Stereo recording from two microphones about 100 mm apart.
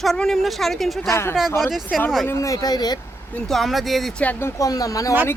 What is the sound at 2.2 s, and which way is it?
Speech, 35° left (ahead or behind).